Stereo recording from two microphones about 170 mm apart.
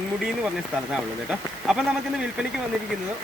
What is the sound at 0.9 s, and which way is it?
Speech, 5° right (ahead or behind).